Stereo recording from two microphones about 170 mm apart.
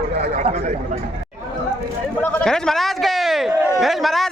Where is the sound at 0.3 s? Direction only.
40° right (ahead or behind).